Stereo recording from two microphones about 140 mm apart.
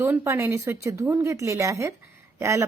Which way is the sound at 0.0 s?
15° right (ahead or behind).